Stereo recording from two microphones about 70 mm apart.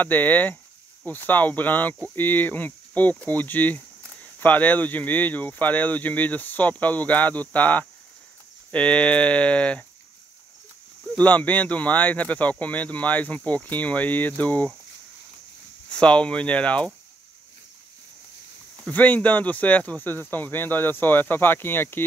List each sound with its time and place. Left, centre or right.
0.0 s speech: left
11.1 s speech: left
15.9 s speech: centre
18.9 s speech: left